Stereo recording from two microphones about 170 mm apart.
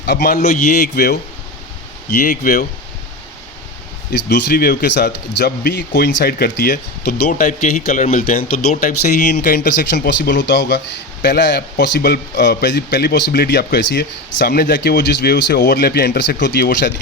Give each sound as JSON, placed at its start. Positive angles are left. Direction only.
{"t": 0.0, "sound": "speech", "side_deg": 75}
{"t": 2.2, "sound": "speech", "side_deg": 50}
{"t": 4.3, "sound": "speech", "side_deg": 85}
{"t": 9.3, "sound": "speech", "side_deg": 65}